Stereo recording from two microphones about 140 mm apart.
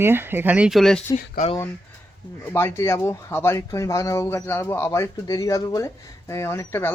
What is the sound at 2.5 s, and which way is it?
Speech, 20° left (ahead or behind).